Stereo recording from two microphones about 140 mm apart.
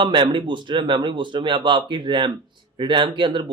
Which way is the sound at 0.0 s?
35° right (ahead or behind).